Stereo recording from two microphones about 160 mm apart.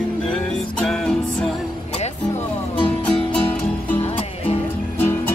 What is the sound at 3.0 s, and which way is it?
Music, 5° left (ahead or behind).